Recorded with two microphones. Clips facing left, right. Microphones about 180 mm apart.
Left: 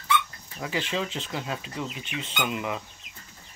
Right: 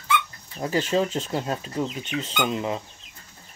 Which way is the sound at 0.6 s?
40° right (ahead or behind).